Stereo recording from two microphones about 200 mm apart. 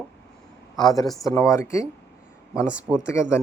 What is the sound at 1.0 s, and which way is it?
Speech, centre (ahead or behind).